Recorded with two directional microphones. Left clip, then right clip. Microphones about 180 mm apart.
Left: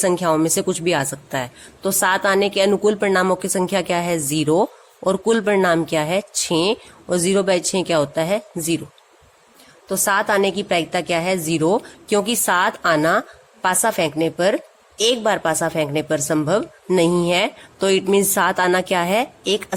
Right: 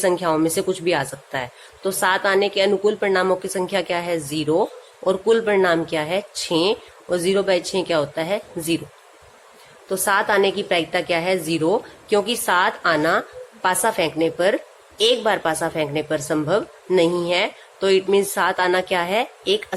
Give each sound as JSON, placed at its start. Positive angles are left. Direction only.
{"t": 0.0, "sound": "a woman's voice", "side_deg": 35}
{"t": 9.9, "sound": "a woman's voice", "side_deg": 35}